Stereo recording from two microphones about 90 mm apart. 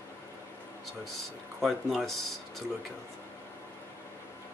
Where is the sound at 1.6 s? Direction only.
Centre (ahead or behind).